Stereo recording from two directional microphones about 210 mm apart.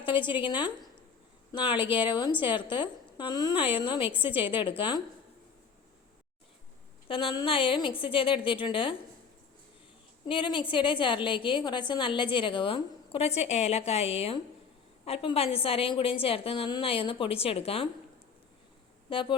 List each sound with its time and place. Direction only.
0.0 s a sound: 25° left (ahead or behind)
0.3 s a woman's voice: 20° left (ahead or behind)
4.1 s a woman's voice: 10° right (ahead or behind)
4.8 s a woman's voice: 20° left (ahead or behind)
7.1 s a woman's voice: 25° left (ahead or behind)
10.2 s a woman's voice: 25° left (ahead or behind)
19.1 s a woman's voice: 25° left (ahead or behind)